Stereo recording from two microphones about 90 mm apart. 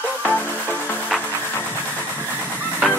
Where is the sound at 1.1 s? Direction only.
Centre (ahead or behind).